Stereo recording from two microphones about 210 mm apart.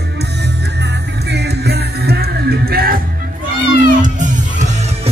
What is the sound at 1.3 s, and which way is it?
Music, 50° right (ahead or behind).